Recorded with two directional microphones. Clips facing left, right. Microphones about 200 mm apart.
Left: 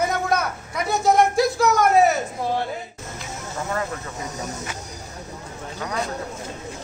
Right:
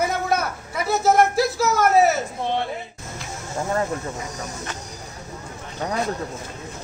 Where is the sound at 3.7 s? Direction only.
30° right (ahead or behind).